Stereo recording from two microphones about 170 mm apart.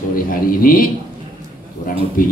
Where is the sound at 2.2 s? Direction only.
55° left (ahead or behind).